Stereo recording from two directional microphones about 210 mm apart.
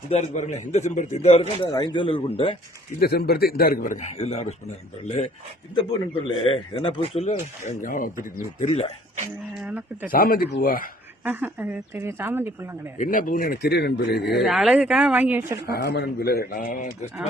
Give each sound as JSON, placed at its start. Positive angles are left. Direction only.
{"t": 0.1, "sound": "speech", "side_deg": 35}
{"t": 1.7, "sound": "a man's voice", "side_deg": 20}
{"t": 3.0, "sound": "speech", "side_deg": 50}
{"t": 4.2, "sound": "a man's voice", "side_deg": 30}
{"t": 9.6, "sound": "speech", "side_deg": -5}
{"t": 10.1, "sound": "speech", "side_deg": 45}
{"t": 11.2, "sound": "speech", "side_deg": -10}
{"t": 13.0, "sound": "speech", "side_deg": 40}
{"t": 14.3, "sound": "speech", "side_deg": 0}
{"t": 15.6, "sound": "speech", "side_deg": 45}